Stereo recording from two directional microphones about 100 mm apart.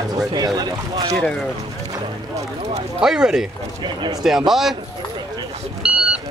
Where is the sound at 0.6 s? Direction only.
40° right (ahead or behind).